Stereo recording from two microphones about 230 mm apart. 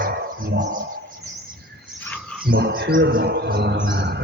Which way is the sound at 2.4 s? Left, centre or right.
Right.